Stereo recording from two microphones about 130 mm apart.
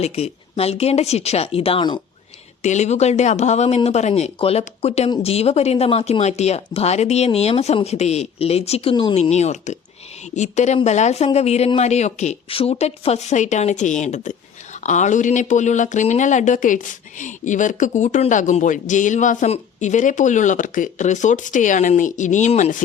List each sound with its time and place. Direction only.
0.0 s speech: 55° left (ahead or behind)
2.6 s speech: 65° left (ahead or behind); by 9.1 s 40° left (ahead or behind)
9.1 s speech: 55° left (ahead or behind)
12.5 s speech: 45° left (ahead or behind); by 22.8 s 65° left (ahead or behind)